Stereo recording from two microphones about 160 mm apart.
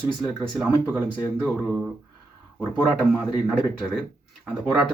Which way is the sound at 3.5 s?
Centre (ahead or behind).